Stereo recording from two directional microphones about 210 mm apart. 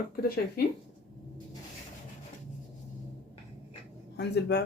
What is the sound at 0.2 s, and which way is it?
Speech, 45° left (ahead or behind).